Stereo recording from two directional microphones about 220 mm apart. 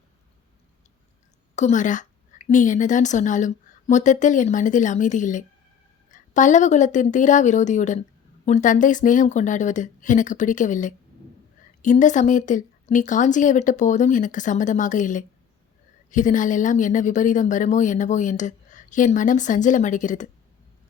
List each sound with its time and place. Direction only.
1.5 s a woman's voice: 35° left (ahead or behind)